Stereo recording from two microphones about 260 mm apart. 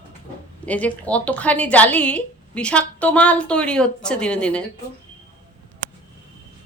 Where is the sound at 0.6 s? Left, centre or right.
Centre.